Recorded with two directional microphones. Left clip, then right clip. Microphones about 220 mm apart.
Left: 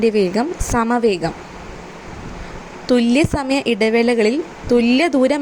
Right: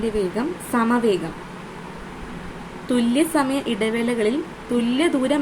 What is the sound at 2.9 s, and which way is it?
A woman's voice, 30° left (ahead or behind).